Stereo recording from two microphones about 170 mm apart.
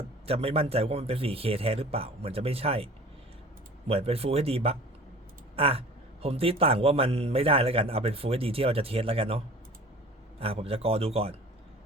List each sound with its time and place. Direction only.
0.3 s a man's voice: 35° right (ahead or behind)
10.4 s a man's voice: 35° right (ahead or behind)